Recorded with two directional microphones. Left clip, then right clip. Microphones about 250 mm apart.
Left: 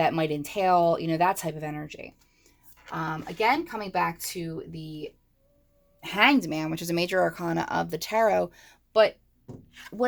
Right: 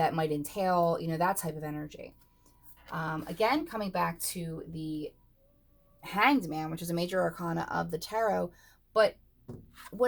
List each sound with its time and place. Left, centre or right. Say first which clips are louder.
0.0 s speech: left 4 dB; left